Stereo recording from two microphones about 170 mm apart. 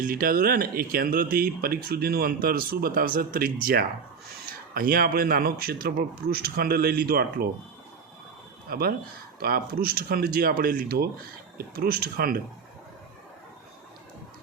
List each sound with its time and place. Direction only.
0.0 s speech: 55° right (ahead or behind)
8.7 s speech: 60° right (ahead or behind)